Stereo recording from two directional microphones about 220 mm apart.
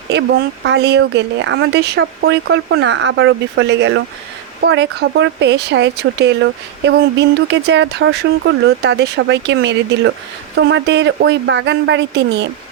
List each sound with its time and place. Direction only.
0.1 s speech: 50° right (ahead or behind)